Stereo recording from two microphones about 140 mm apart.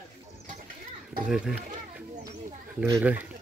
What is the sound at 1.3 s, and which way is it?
Speech, 5° right (ahead or behind).